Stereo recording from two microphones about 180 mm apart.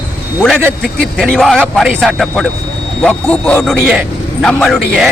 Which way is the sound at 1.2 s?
Centre (ahead or behind).